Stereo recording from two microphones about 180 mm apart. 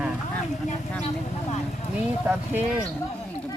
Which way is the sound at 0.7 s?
40° left (ahead or behind).